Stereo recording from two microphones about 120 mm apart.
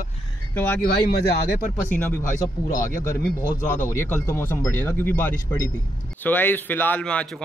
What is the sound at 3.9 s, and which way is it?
A man's voice, 25° left (ahead or behind).